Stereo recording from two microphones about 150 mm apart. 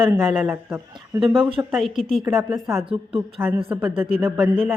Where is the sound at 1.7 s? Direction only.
Centre (ahead or behind); by 4.4 s 15° right (ahead or behind).